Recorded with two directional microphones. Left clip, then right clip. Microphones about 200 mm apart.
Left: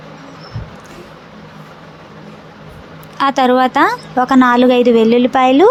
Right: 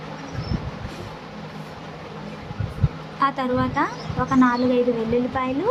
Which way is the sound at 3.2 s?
50° left (ahead or behind).